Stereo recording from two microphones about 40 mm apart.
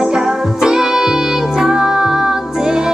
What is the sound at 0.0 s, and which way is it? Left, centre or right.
Music, centre.